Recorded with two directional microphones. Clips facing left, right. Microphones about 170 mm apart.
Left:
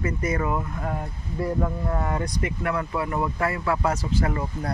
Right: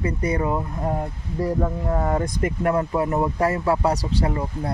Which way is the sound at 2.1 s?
45° right (ahead or behind).